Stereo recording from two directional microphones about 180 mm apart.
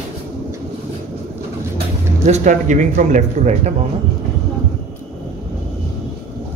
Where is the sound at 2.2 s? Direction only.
40° right (ahead or behind).